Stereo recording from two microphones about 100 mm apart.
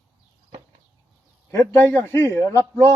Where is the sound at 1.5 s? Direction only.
30° left (ahead or behind).